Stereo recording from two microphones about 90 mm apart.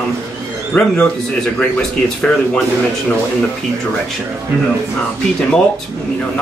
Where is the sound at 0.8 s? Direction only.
15° left (ahead or behind).